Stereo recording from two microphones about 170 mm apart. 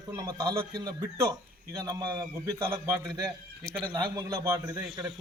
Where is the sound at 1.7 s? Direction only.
20° right (ahead or behind).